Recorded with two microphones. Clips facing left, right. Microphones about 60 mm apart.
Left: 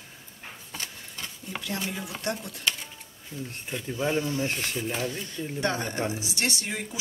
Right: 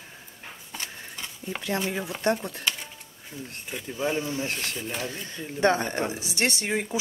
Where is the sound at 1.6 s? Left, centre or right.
Right.